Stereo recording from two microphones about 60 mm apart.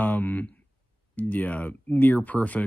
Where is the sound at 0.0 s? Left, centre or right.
Left.